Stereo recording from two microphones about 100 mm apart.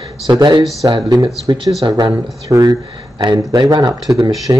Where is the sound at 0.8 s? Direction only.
40° right (ahead or behind).